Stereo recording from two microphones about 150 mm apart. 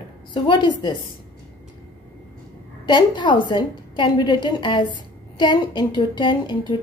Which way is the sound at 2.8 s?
30° left (ahead or behind).